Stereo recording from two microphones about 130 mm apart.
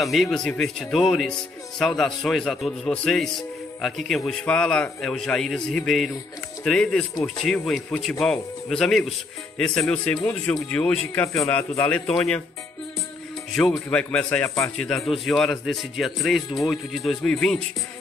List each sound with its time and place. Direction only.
0.0 s a man's voice: centre (ahead or behind)
13.5 s a man's voice: 5° left (ahead or behind)